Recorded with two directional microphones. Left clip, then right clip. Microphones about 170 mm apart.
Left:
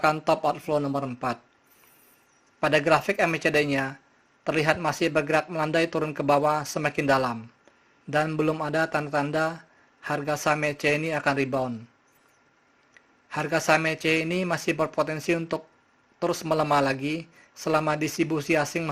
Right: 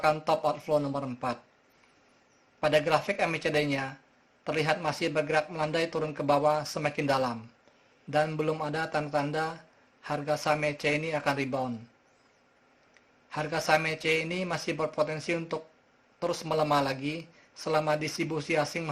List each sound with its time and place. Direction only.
0.0 s speech: 30° left (ahead or behind)
2.6 s speech: 30° left (ahead or behind)
13.3 s speech: 30° left (ahead or behind)